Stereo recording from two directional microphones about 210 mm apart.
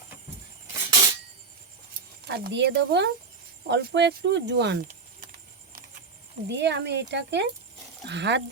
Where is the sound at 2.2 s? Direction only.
50° right (ahead or behind).